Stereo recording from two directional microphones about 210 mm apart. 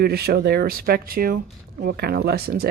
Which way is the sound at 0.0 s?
50° right (ahead or behind).